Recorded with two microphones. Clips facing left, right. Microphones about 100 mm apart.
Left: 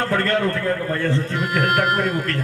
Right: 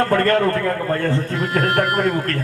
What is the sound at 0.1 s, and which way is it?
A man's voice, 50° right (ahead or behind).